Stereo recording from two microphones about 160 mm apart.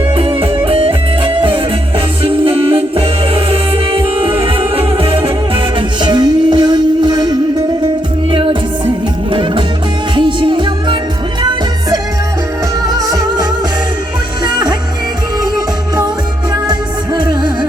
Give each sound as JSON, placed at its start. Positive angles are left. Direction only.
{"t": 0.2, "sound": "music", "side_deg": -35}
{"t": 12.9, "sound": "music", "side_deg": -20}
{"t": 16.6, "sound": "music", "side_deg": -25}